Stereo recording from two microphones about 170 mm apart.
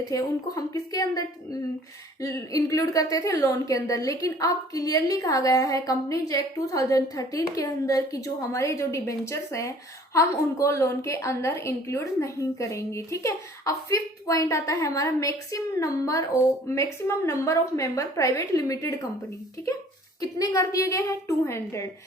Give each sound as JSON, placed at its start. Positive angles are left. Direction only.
{"t": 0.1, "sound": "a woman's voice", "side_deg": 20}
{"t": 2.2, "sound": "a woman's voice", "side_deg": 20}
{"t": 20.2, "sound": "a woman's voice", "side_deg": 20}